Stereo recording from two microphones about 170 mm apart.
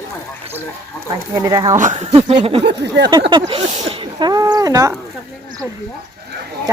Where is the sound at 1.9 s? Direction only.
40° right (ahead or behind).